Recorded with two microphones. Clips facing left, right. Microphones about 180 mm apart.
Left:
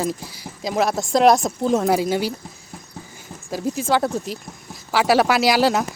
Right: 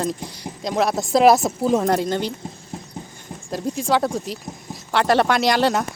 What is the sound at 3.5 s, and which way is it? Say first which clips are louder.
Speech: even; centre (ahead or behind).